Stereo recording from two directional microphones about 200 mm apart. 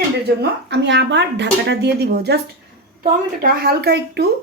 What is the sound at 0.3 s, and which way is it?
A woman's voice, 60° right (ahead or behind).